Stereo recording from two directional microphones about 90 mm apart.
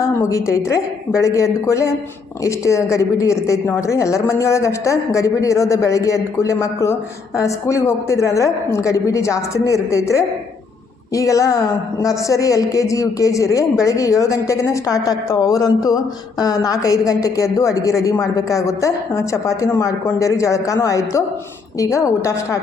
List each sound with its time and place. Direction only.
0.2 s a woman's voice: 35° left (ahead or behind)